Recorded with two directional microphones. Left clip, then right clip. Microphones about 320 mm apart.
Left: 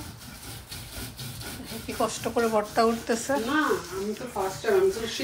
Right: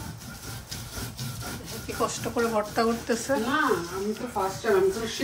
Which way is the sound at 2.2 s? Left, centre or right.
Centre.